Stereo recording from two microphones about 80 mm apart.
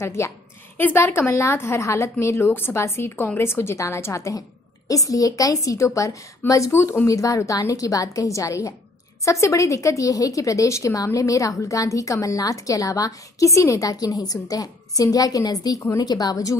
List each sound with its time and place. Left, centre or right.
0.0 s a woman's voice: left
0.7 s a woman's voice: left
1.0 s a woman's voice: left